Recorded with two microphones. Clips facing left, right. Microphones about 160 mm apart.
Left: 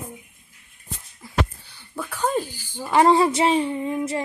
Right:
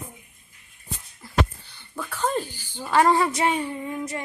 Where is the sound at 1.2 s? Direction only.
10° left (ahead or behind).